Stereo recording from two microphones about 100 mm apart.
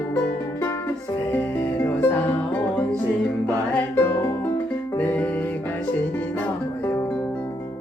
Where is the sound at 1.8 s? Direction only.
20° left (ahead or behind).